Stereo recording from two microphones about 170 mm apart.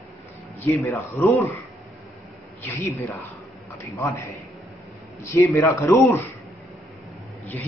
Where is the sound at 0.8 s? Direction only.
15° left (ahead or behind).